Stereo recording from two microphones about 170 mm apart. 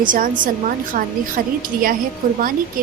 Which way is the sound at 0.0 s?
50° right (ahead or behind).